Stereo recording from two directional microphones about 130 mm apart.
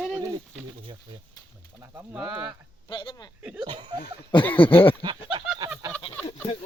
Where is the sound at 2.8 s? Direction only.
35° left (ahead or behind).